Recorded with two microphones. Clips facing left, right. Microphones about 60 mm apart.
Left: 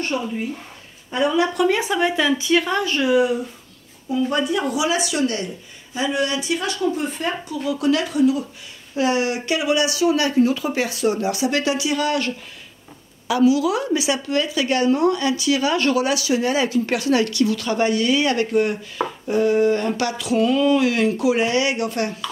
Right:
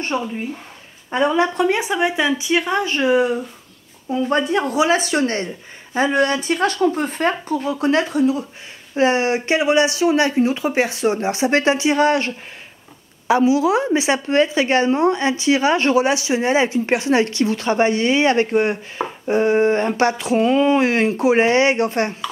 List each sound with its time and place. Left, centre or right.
0.1 s speech: right